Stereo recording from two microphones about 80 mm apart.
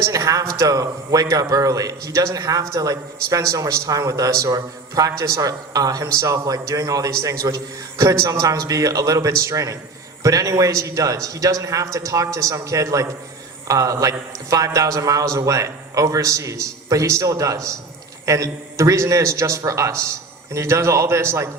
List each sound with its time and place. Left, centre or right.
0.1 s a man's voice: right